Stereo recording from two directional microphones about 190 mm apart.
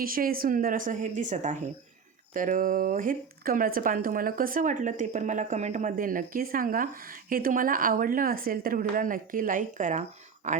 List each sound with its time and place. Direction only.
0.0 s speech: 50° right (ahead or behind)